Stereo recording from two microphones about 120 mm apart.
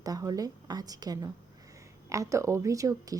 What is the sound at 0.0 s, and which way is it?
A woman's voice, 30° right (ahead or behind).